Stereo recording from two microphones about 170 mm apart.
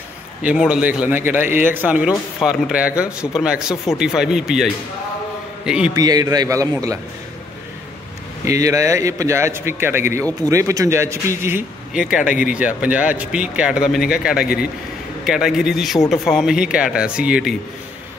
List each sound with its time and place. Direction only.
0.4 s a man's voice: 5° right (ahead or behind)
5.7 s speech: 5° right (ahead or behind)
5.9 s a man's voice: 20° right (ahead or behind)
8.5 s speech: 20° right (ahead or behind)
12.0 s a man's voice: 5° right (ahead or behind)